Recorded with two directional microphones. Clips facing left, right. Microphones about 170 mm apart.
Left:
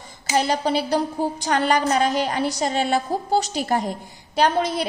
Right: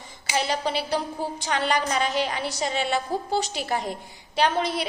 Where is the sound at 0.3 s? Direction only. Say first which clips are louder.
Left 5 dB; 40° left (ahead or behind).